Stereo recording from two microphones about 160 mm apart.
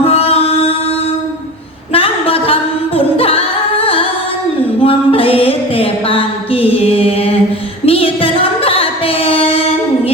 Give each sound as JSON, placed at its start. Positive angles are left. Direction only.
{"t": 0.0, "sound": "music", "side_deg": 40}
{"t": 1.9, "sound": "a capella", "side_deg": 35}
{"t": 4.8, "sound": "music", "side_deg": 35}